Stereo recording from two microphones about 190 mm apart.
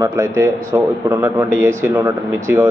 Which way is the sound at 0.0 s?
15° right (ahead or behind).